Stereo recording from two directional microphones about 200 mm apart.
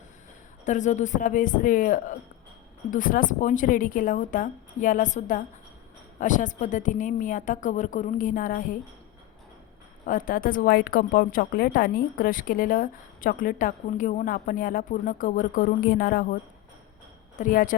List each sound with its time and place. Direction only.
0.6 s a woman's voice: 35° left (ahead or behind)
10.1 s a woman's voice: 45° left (ahead or behind)